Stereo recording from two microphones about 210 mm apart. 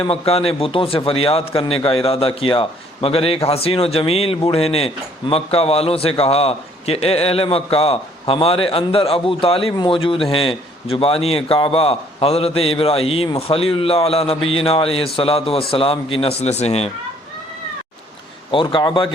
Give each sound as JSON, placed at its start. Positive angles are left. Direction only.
{"t": 0.0, "sound": "a man's voice", "side_deg": 30}
{"t": 18.5, "sound": "a man's voice", "side_deg": 25}